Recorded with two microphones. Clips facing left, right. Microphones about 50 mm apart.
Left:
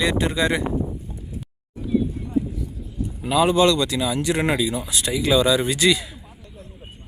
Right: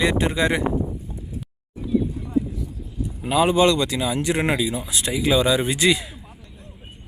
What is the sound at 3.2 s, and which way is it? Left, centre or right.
Speech, right.